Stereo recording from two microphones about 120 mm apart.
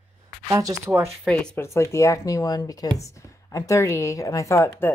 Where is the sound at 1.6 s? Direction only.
25° left (ahead or behind).